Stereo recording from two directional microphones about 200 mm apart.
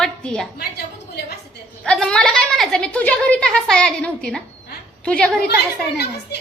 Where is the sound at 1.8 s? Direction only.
5° left (ahead or behind).